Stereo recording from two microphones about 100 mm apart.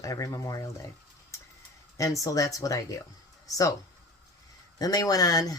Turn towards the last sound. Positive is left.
turn(degrees=40)  # may be behind; listen again after turning